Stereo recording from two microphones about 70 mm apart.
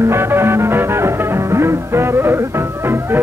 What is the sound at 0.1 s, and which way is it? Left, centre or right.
Music, right.